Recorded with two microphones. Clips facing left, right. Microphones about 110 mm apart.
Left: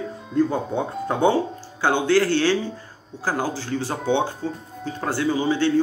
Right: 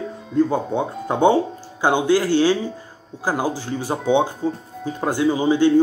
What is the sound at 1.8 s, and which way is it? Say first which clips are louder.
Speech: right 1 dB; 15° right (ahead or behind).